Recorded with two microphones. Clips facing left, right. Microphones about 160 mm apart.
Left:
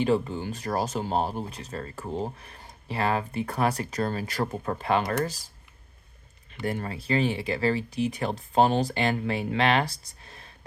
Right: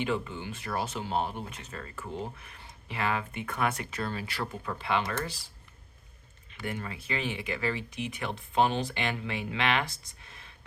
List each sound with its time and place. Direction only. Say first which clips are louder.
0.0 s speech: left 7 dB; 35° left (ahead or behind)
6.5 s speech: left 6 dB; 40° left (ahead or behind)